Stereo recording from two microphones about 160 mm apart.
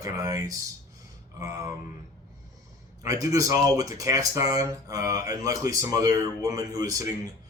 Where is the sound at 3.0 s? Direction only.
20° right (ahead or behind).